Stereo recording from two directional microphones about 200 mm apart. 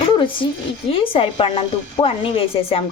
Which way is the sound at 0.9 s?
25° left (ahead or behind).